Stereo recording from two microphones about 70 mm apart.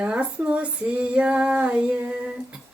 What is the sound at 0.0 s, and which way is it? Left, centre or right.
Female singing, centre.